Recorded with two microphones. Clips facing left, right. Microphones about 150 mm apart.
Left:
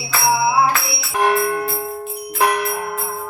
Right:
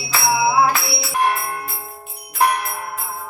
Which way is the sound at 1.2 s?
90° left.